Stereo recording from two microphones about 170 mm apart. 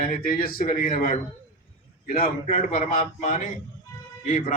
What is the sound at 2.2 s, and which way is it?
A man's voice, 50° left (ahead or behind).